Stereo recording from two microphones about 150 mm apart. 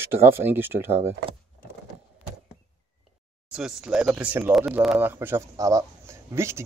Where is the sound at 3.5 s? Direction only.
5° right (ahead or behind).